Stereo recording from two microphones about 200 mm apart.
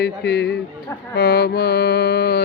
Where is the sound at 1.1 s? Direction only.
50° left (ahead or behind).